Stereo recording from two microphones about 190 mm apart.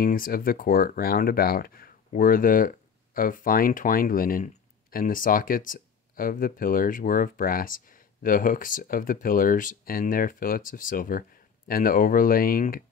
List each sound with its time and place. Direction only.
0.0 s speech: 50° left (ahead or behind)